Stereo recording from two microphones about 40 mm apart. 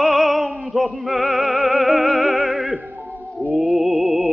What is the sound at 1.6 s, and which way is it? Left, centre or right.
Music, centre.